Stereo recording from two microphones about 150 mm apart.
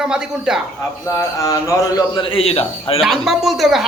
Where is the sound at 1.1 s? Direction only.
20° left (ahead or behind).